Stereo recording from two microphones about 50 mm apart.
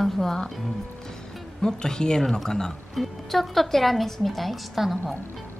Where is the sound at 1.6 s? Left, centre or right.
Centre.